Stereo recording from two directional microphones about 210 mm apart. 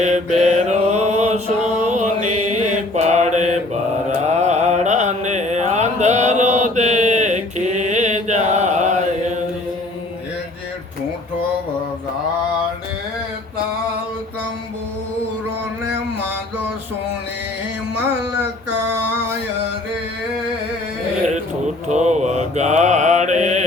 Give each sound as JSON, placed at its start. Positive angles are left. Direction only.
{"t": 0.0, "sound": "mantra", "side_deg": -35}
{"t": 21.8, "sound": "mantra", "side_deg": -35}